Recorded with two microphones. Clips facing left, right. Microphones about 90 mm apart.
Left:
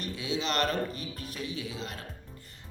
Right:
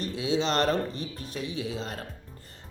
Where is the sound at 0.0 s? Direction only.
35° right (ahead or behind).